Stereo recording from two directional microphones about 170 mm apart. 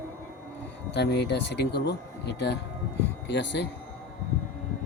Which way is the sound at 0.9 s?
80° left.